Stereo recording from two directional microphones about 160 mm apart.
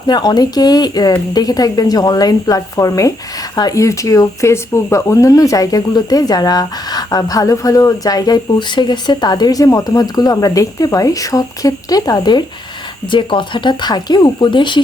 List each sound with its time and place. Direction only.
0.1 s speech: 25° left (ahead or behind)